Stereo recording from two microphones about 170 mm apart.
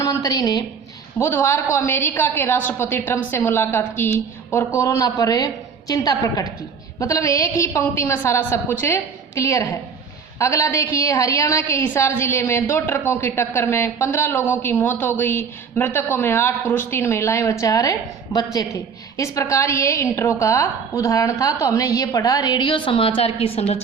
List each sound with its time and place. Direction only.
0.0 s a woman's voice: 20° left (ahead or behind); by 23.8 s 35° left (ahead or behind)